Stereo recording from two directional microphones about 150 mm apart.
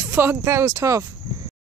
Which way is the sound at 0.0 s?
15° right (ahead or behind).